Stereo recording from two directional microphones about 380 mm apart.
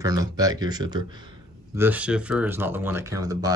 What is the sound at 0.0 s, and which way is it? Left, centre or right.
Speech, centre.